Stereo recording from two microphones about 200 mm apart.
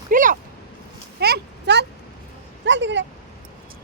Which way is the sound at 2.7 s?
65° right (ahead or behind).